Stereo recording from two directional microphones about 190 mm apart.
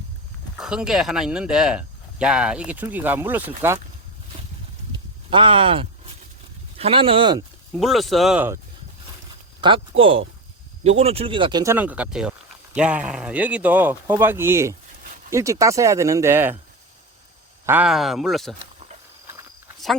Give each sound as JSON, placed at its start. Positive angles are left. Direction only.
{"t": 0.6, "sound": "speech", "side_deg": -5}
{"t": 5.3, "sound": "speech", "side_deg": -25}
{"t": 7.8, "sound": "speech", "side_deg": 0}
{"t": 9.6, "sound": "speech", "side_deg": -25}
{"t": 10.8, "sound": "speech", "side_deg": -30}
{"t": 17.7, "sound": "speech", "side_deg": -5}